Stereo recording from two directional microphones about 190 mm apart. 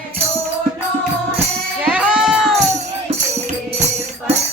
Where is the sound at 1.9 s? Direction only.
5° right (ahead or behind).